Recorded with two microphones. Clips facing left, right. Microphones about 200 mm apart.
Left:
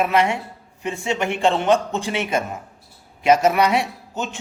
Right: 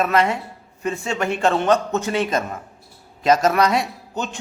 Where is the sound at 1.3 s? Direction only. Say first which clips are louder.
Right 1 dB; 25° left (ahead or behind).